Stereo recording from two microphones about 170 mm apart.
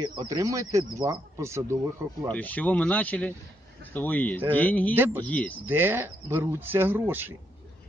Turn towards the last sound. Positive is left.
turn(degrees=-10)  # may be behind; listen again after turning